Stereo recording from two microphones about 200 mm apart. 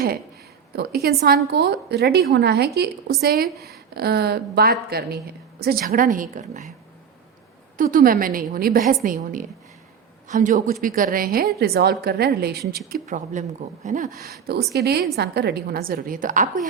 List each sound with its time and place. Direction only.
0.8 s a woman's voice: 50° right (ahead or behind)
7.8 s a woman's voice: 45° right (ahead or behind)